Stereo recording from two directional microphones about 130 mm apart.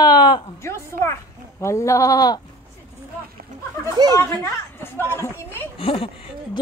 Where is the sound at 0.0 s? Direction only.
35° left (ahead or behind).